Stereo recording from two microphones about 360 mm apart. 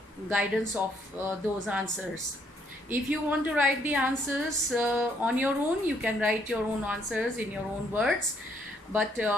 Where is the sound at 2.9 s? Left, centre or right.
Centre.